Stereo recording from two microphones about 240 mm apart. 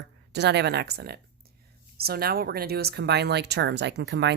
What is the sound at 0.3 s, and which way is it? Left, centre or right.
A woman's voice, right.